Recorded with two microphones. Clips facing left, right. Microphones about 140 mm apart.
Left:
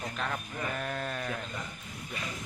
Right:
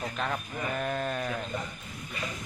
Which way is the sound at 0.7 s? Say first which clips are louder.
Right 5 dB; 5° right (ahead or behind).